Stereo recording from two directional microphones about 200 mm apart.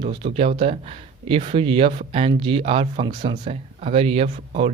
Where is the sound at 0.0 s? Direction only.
25° right (ahead or behind).